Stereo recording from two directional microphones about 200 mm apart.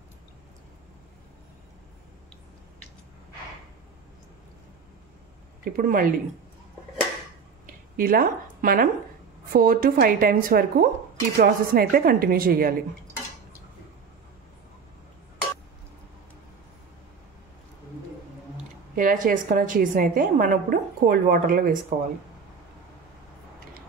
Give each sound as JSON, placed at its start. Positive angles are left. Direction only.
{"t": 5.7, "sound": "a woman's voice", "side_deg": -45}
{"t": 7.6, "sound": "a sound", "side_deg": -45}
{"t": 9.5, "sound": "a woman's voice", "side_deg": -45}
{"t": 18.9, "sound": "a woman's voice", "side_deg": -40}